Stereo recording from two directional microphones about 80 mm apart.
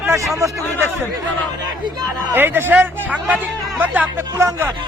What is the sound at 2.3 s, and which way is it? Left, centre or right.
A man's voice, right.